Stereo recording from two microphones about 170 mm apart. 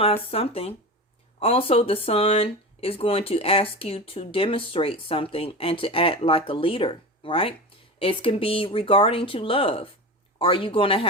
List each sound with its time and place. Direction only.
0.0 s speech: 35° left (ahead or behind)